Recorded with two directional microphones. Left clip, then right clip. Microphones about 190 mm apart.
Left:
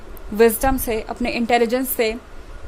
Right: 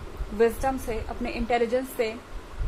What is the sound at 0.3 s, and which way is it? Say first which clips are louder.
A woman's voice: left 8 dB; 55° left (ahead or behind).